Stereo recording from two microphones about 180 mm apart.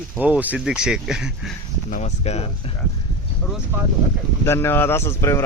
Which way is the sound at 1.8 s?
40° left (ahead or behind).